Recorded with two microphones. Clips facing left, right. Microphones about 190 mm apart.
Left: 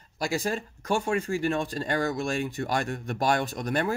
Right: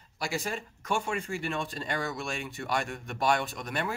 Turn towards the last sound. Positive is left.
turn(degrees=40)  # may be behind; listen again after turning